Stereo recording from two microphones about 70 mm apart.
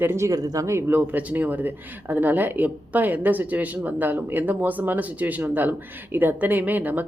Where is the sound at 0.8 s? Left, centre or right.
Right.